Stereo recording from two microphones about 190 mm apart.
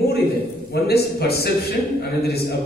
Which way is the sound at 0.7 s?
55° left (ahead or behind).